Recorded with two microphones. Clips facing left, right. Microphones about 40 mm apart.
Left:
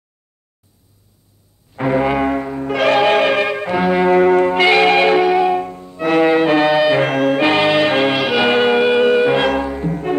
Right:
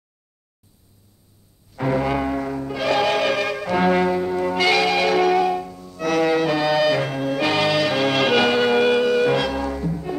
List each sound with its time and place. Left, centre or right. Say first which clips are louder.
1.7 s music: left 5 dB; left
3.7 s brass instrument: left 1 dB; centre
4.1 s church bell: left 10 dB; left
4.5 s church bell: left 6 dB; left
5.2 s music: left 4 dB; left
5.6 s music: left 6 dB; left
7.0 s music: left 8 dB; left
7.3 s music: left 3 dB; left
8.2 s music: left 1 dB; centre
8.5 s music: left 4 dB; left
9.8 s music: left 6 dB; left